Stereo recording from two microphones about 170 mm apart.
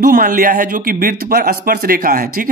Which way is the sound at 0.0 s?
55° right (ahead or behind).